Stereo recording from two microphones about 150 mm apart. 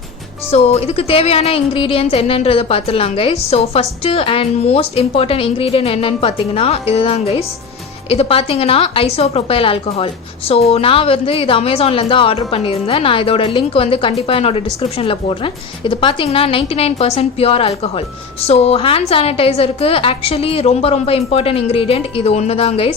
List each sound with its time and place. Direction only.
0.5 s speech: 45° left (ahead or behind)